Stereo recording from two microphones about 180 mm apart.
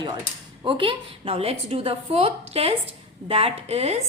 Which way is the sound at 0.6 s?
30° right (ahead or behind).